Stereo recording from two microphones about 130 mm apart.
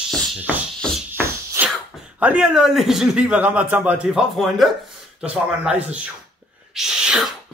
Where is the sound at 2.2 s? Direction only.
10° right (ahead or behind).